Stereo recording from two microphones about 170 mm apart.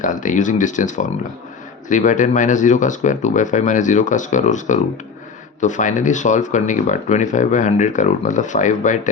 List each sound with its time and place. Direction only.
0.0 s speech: 50° left (ahead or behind)